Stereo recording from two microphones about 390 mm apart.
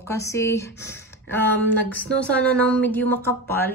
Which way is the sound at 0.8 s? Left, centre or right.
Left.